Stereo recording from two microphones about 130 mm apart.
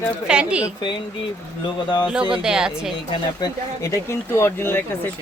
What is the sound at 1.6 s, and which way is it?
Speech, 35° left (ahead or behind).